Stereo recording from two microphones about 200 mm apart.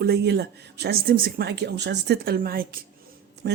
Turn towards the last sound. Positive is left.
turn(degrees=-55)  # may be behind; listen again after turning